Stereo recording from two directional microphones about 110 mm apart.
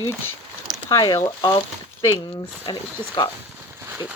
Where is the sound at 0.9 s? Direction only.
30° left (ahead or behind).